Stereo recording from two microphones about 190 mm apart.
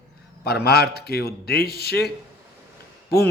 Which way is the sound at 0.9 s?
55° left (ahead or behind).